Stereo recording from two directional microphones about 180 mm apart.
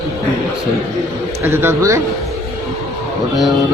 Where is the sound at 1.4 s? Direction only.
10° right (ahead or behind).